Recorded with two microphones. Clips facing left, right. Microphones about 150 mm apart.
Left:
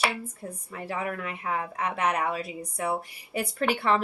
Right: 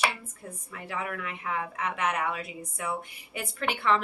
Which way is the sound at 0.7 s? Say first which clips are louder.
Left 3 dB; 35° left (ahead or behind).